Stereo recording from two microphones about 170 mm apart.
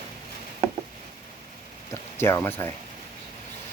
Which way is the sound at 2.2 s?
15° left (ahead or behind).